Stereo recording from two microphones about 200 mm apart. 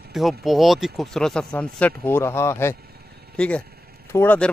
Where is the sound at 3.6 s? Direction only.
50° right (ahead or behind).